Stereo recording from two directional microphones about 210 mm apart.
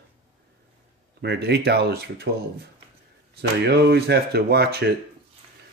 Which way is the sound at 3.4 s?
50° right (ahead or behind).